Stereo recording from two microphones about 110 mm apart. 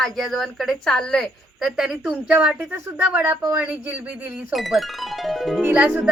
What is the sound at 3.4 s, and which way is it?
Speech, 25° right (ahead or behind).